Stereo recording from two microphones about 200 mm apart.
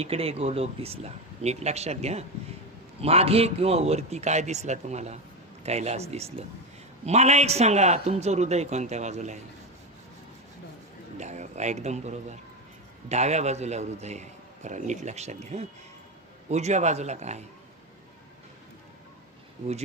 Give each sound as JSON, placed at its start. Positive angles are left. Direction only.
{"t": 0.0, "sound": "a man's voice", "side_deg": -30}
{"t": 11.2, "sound": "a man's voice", "side_deg": -35}